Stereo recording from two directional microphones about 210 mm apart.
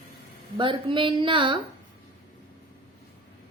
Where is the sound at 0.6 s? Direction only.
25° right (ahead or behind).